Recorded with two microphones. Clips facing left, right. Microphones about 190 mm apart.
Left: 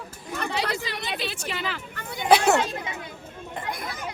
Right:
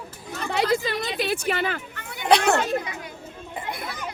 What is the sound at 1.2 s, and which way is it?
Speech, 55° right (ahead or behind).